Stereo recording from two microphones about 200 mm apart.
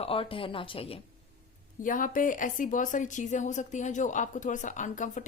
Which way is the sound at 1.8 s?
40° left (ahead or behind).